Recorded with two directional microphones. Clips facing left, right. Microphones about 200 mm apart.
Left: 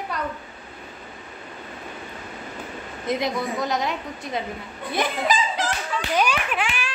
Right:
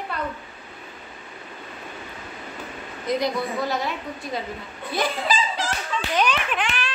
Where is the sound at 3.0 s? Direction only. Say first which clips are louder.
Right 1 dB; 20° left (ahead or behind).